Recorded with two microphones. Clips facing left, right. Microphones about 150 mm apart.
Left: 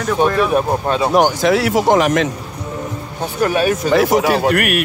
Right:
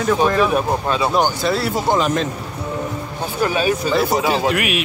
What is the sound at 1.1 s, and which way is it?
Speech, 90° left.